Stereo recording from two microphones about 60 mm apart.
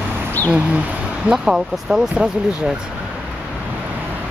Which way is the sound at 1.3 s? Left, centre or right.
Centre.